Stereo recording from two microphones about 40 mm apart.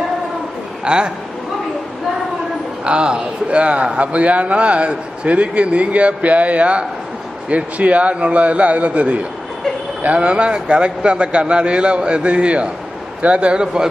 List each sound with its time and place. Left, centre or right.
0.8 s a man's voice: right
2.8 s a man's voice: right